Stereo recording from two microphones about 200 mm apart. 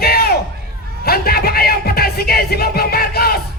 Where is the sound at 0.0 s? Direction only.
50° left (ahead or behind).